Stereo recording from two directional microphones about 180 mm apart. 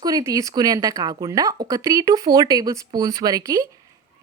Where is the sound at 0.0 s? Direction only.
20° right (ahead or behind).